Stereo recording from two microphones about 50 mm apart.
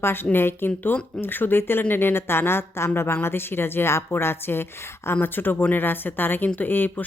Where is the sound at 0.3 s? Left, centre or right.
Left.